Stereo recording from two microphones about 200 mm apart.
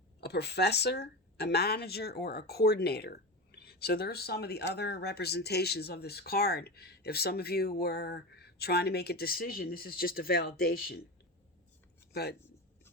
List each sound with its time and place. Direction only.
0.2 s speech: 55° left (ahead or behind)
12.1 s speech: 55° left (ahead or behind)